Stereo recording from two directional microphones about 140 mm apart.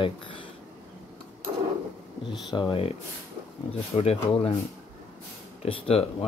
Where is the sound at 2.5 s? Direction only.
35° left (ahead or behind).